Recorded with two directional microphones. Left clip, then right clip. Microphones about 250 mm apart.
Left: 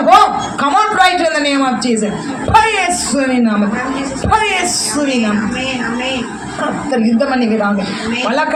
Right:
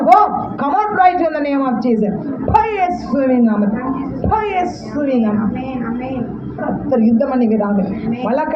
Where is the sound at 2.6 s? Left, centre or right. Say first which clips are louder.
Left 3 dB; left.